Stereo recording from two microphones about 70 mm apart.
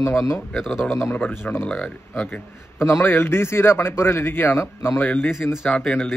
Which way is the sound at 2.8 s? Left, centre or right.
Left.